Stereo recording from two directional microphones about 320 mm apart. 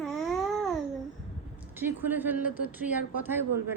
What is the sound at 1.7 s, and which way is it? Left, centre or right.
Speech, centre.